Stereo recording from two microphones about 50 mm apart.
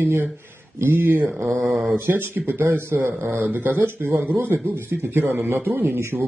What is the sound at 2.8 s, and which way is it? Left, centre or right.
Speech, right.